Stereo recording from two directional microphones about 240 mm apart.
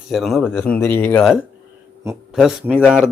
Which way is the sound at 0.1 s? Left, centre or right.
Centre.